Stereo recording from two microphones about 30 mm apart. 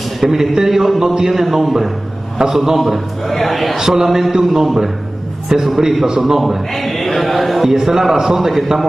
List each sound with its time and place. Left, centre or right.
0.3 s a man's voice: centre
2.8 s a man's voice: centre
3.7 s a man's voice: centre
4.6 s a man's voice: centre
5.5 s a man's voice: right
6.0 s a man's voice: centre
6.7 s chant: centre
7.2 s a man's voice: centre
7.7 s a man's voice: centre